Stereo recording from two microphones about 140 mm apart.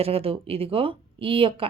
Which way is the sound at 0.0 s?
45° right (ahead or behind).